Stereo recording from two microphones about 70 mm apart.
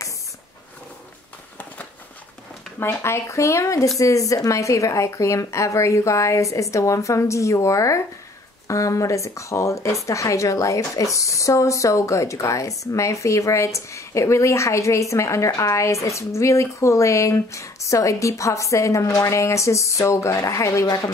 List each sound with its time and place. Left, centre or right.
2.8 s speech: left